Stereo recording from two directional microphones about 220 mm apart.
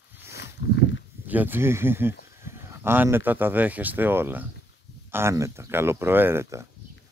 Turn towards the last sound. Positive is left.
turn(degrees=-10)  # may be behind; listen again after turning